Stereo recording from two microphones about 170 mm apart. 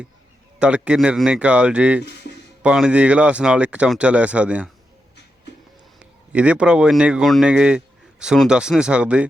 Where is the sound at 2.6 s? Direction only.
5° right (ahead or behind).